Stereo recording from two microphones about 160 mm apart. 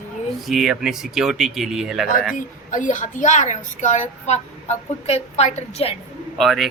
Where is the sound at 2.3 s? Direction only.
50° left (ahead or behind).